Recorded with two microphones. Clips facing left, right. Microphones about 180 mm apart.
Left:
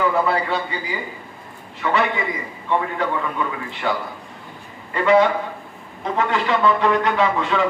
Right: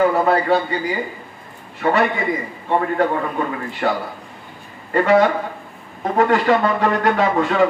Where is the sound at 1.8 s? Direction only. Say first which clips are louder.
Right 3 dB; 45° right (ahead or behind).